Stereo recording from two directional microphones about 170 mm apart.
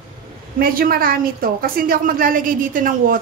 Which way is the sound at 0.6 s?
60° right (ahead or behind).